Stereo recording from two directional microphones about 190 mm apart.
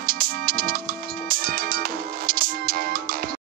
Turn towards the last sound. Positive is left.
turn(degrees=-50)  # may be behind; listen again after turning